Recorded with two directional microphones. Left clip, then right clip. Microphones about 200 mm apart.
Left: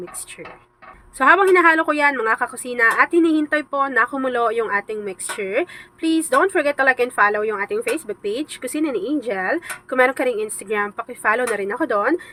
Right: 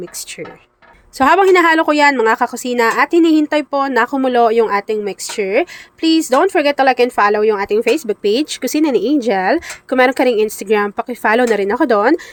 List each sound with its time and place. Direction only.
1.2 s a woman's voice: 35° right (ahead or behind)